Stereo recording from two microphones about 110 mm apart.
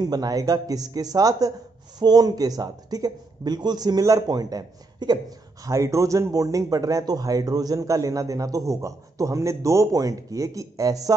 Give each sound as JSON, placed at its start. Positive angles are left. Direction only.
{"t": 0.0, "sound": "speech", "side_deg": -35}
{"t": 5.7, "sound": "speech", "side_deg": -30}